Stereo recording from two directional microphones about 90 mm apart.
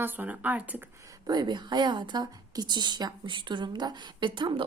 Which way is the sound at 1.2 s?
50° right (ahead or behind).